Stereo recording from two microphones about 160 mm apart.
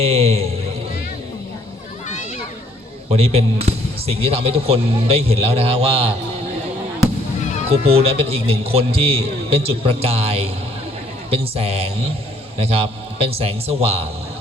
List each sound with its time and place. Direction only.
0.0 s a sound: 40° right (ahead or behind)
3.1 s speech: 40° right (ahead or behind)
7.7 s speech: 40° right (ahead or behind)